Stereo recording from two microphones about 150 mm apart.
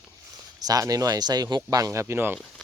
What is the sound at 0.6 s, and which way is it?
Speech, 25° right (ahead or behind).